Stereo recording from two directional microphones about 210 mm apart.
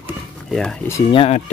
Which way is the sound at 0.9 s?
25° left (ahead or behind).